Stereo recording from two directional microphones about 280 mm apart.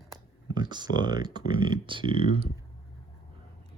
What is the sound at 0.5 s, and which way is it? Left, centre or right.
Speech, centre.